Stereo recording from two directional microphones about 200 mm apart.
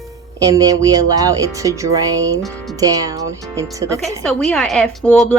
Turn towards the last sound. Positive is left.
turn(degrees=10)  # may be behind; listen again after turning